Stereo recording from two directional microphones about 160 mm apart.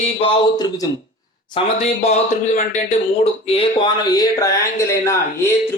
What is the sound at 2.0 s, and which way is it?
Speech, 45° left (ahead or behind).